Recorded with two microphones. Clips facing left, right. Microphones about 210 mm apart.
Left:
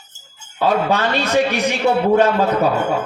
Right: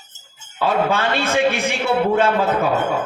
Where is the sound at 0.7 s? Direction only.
40° left (ahead or behind).